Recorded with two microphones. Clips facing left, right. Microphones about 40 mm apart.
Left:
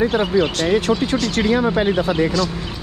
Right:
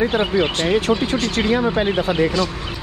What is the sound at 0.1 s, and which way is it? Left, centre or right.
Speech, right.